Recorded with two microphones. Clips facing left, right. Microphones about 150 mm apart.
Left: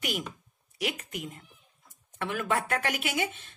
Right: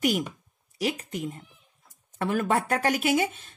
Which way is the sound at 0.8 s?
35° right (ahead or behind).